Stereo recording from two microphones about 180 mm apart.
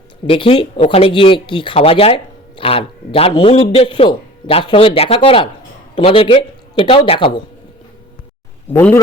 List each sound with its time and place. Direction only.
0.3 s speech: 30° left (ahead or behind)
8.7 s speech: 10° left (ahead or behind)